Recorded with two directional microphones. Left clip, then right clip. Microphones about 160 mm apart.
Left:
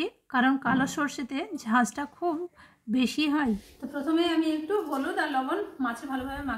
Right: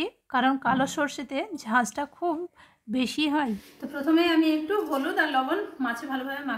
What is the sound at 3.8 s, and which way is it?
A woman's voice, 5° right (ahead or behind).